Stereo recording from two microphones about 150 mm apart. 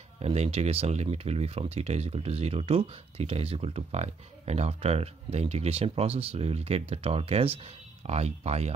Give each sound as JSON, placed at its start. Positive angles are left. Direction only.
{"t": 0.2, "sound": "speech", "side_deg": -45}